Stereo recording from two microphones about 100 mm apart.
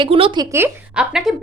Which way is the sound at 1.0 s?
5° right (ahead or behind).